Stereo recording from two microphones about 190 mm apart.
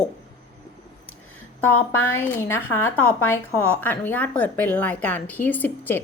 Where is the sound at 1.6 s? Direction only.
10° left (ahead or behind).